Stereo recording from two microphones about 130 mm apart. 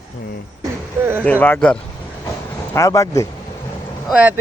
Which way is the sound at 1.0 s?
15° right (ahead or behind).